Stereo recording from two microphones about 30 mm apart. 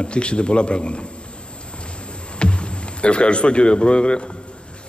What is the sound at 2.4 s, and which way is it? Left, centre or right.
A man's voice, left.